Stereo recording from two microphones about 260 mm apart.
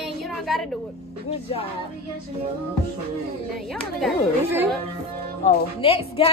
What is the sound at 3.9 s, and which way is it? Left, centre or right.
Speech, centre.